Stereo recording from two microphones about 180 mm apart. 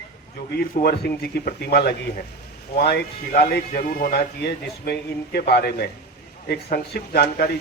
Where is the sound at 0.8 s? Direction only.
60° left (ahead or behind).